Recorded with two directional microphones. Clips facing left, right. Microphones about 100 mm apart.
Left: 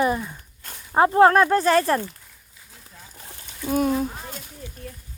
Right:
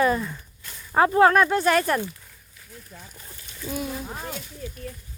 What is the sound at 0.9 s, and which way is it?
Speech, 30° left (ahead or behind).